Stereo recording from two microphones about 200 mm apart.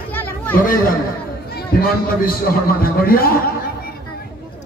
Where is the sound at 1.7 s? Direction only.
45° left (ahead or behind).